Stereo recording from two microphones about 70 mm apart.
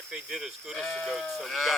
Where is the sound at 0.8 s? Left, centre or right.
Centre.